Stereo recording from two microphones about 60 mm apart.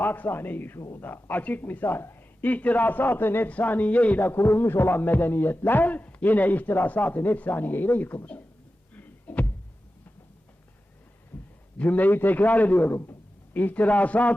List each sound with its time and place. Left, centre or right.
0.0 s a man's voice: left
2.4 s a man's voice: left
4.3 s a man's voice: left
9.0 s a sound: left
11.8 s a man's voice: left